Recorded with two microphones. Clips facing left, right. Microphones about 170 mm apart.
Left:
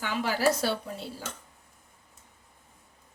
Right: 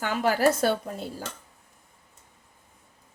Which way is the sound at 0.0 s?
50° right (ahead or behind).